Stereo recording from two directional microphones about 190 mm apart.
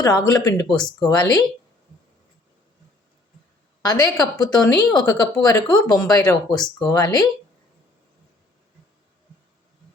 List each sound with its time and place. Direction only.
0.0 s speech: 20° left (ahead or behind)
3.8 s speech: 20° left (ahead or behind)